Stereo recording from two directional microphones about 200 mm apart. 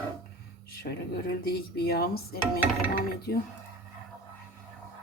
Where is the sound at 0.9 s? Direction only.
45° left (ahead or behind).